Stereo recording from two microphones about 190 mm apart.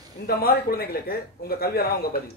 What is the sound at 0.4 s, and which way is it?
A man's voice, 55° left (ahead or behind).